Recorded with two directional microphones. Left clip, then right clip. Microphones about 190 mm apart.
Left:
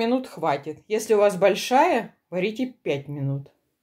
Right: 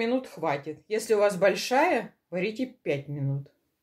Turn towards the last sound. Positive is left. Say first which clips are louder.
# left 3 dB
turn(degrees=20)  # may be behind; listen again after turning